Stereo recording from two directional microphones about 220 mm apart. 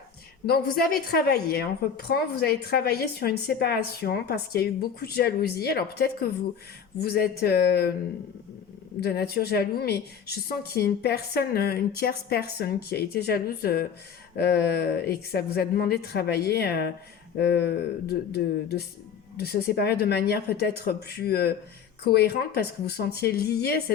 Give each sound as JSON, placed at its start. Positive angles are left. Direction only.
{"t": 0.4, "sound": "a woman's voice", "side_deg": 45}
{"t": 9.0, "sound": "a woman's voice", "side_deg": 45}